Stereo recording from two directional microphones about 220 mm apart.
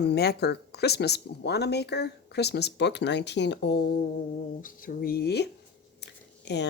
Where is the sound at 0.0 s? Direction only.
50° left (ahead or behind).